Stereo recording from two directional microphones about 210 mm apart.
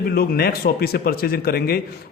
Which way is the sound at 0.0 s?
45° left (ahead or behind).